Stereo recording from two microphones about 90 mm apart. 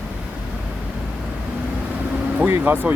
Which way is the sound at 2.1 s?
20° right (ahead or behind).